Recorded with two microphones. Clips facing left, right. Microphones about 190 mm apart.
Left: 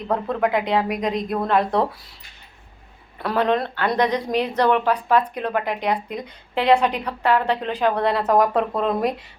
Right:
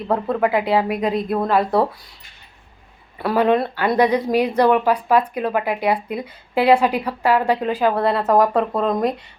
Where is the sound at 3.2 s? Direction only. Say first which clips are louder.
Right 4 dB; 5° right (ahead or behind).